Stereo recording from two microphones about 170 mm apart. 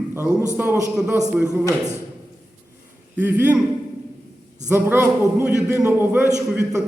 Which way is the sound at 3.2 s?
10° right (ahead or behind).